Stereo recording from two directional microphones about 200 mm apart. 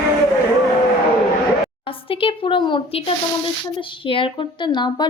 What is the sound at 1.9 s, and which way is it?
Speech, 25° left (ahead or behind).